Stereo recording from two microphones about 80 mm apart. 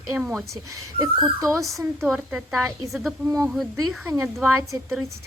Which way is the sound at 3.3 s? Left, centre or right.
Right.